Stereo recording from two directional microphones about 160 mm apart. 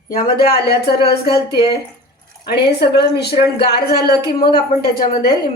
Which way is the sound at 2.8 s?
90° left.